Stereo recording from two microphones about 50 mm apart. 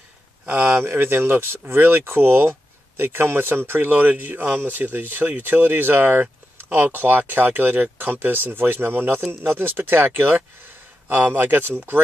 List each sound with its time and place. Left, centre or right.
0.8 s speech: right
3.9 s speech: right